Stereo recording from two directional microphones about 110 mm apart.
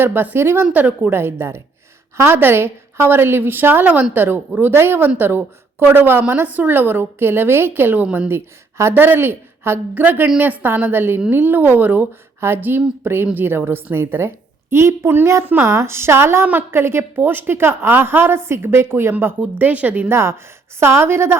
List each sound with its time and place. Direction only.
0.0 s a woman's voice: 20° right (ahead or behind)
8.8 s a woman's voice: 20° right (ahead or behind)